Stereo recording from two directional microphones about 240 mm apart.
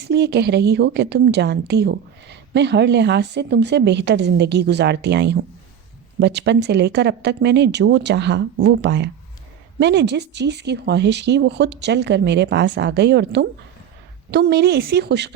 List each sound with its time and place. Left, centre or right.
0.1 s a woman's voice: right